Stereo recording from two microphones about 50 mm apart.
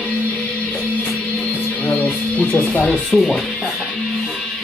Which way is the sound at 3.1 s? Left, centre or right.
Centre.